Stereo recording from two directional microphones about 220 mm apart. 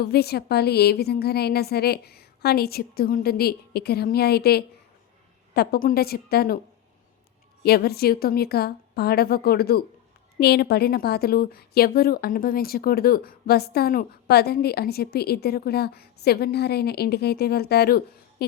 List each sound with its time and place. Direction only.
0.0 s a woman's voice: 45° left (ahead or behind)
7.6 s a woman's voice: 45° left (ahead or behind)